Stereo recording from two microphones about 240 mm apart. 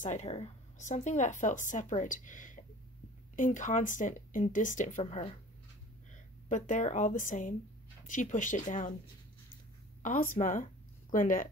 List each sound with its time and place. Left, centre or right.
0.0 s speech: left
6.5 s speech: left
10.0 s speech: left